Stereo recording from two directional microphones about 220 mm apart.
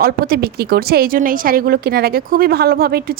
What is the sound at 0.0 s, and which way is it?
Speech, 45° right (ahead or behind).